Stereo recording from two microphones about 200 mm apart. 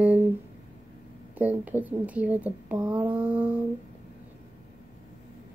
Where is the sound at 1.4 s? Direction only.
10° right (ahead or behind).